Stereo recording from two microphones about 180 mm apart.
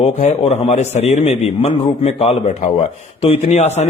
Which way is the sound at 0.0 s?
35° left (ahead or behind).